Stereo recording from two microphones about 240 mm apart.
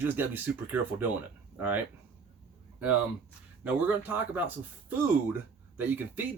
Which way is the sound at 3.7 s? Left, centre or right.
Centre.